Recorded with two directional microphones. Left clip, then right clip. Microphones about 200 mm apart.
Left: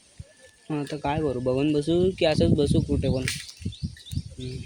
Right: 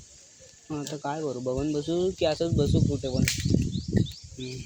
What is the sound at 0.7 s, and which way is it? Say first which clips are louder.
Speech: left 4 dB; 15° left (ahead or behind).